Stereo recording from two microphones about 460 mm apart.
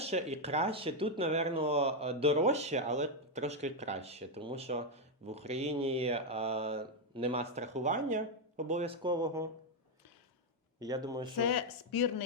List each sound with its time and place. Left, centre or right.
0.0 s speech: centre
10.8 s speech: centre
11.4 s speech: left